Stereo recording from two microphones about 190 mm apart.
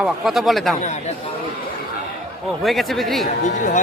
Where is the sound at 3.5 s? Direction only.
40° left (ahead or behind).